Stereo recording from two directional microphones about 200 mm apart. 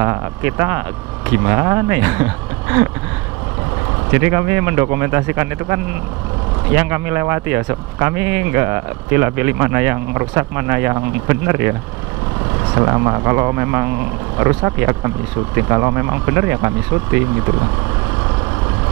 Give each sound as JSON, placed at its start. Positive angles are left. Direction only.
{"t": 0.0, "sound": "speech", "side_deg": -10}
{"t": 4.1, "sound": "speech", "side_deg": -10}
{"t": 12.7, "sound": "speech", "side_deg": -20}